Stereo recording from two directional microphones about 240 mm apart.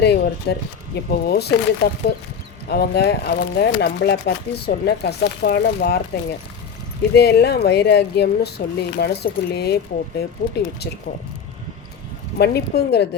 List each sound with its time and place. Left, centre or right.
0.0 s speech: left
7.1 s speech: left
12.4 s speech: left